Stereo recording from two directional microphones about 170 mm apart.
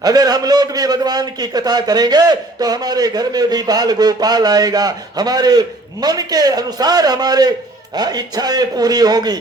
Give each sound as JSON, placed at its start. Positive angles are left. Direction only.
{"t": 0.0, "sound": "a man's voice", "side_deg": -20}